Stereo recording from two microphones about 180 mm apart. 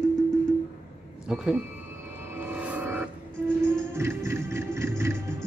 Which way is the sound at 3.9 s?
15° right (ahead or behind).